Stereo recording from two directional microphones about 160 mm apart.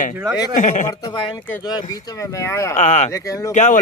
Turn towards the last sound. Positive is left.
turn(degrees=50)  # may be behind; listen again after turning